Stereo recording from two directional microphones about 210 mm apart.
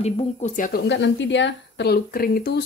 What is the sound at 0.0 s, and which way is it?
Speech, 35° left (ahead or behind).